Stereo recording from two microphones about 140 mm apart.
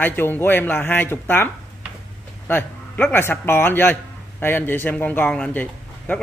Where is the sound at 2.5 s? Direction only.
15° left (ahead or behind).